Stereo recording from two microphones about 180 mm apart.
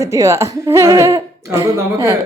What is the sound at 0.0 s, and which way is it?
A woman's voice, 15° right (ahead or behind).